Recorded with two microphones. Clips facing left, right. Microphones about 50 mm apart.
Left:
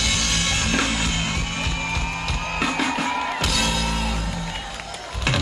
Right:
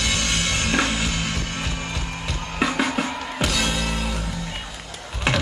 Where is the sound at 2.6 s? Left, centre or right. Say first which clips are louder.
Right 2 dB; centre.